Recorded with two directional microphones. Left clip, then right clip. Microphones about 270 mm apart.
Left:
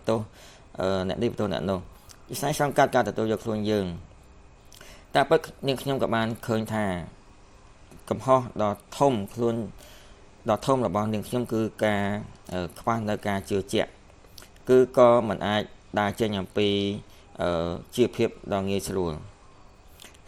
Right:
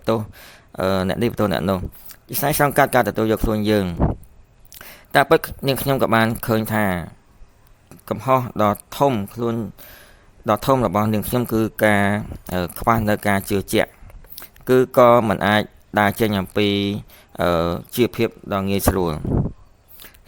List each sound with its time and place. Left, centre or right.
0.0 s speech: right